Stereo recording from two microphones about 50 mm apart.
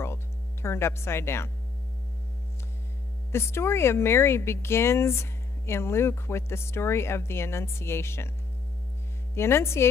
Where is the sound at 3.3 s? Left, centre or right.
Left.